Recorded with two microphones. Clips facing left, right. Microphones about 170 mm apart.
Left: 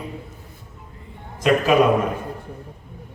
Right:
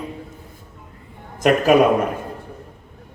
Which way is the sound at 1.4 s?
50° right (ahead or behind).